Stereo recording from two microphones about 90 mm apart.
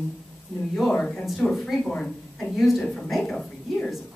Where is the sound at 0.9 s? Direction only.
10° left (ahead or behind).